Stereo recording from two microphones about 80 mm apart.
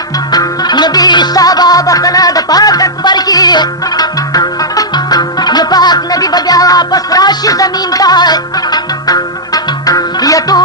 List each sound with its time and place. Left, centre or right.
0.3 s music: left